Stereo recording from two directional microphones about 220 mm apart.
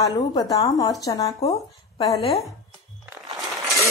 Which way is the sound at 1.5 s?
25° left (ahead or behind).